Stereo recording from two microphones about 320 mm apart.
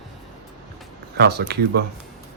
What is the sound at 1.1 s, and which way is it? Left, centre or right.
Speech, right.